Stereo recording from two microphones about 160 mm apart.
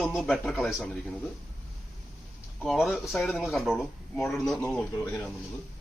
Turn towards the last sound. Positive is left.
turn(degrees=10)  # may be behind; listen again after turning